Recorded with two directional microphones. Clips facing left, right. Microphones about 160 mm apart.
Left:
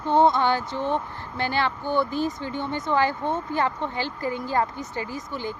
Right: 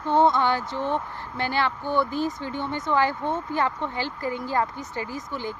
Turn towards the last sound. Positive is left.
turn(degrees=20)  # may be behind; listen again after turning